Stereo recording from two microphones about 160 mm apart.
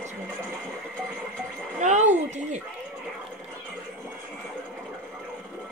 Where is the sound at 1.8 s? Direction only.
45° right (ahead or behind).